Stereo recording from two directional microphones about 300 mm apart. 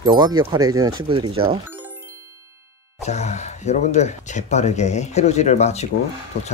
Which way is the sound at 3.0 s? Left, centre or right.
Left.